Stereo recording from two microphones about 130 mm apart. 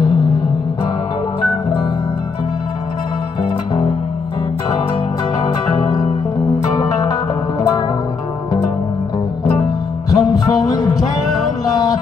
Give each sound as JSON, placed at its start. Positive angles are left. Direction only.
{"t": 5.4, "sound": "music", "side_deg": 30}
{"t": 10.1, "sound": "music", "side_deg": 30}